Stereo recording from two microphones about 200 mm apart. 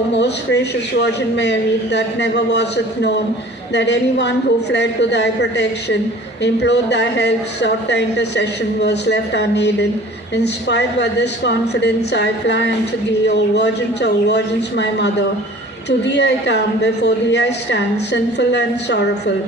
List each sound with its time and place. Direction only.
0.2 s a woman's voice: 60° left (ahead or behind)